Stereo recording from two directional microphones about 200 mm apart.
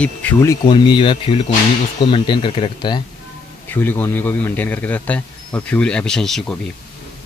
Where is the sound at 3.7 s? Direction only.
10° left (ahead or behind).